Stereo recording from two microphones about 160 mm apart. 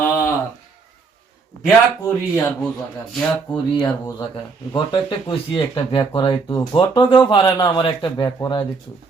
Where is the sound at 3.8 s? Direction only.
25° left (ahead or behind).